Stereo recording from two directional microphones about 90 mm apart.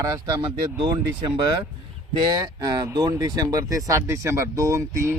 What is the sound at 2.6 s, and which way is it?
Speech, 45° right (ahead or behind).